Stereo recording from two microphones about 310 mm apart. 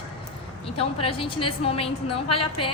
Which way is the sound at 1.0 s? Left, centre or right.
Centre.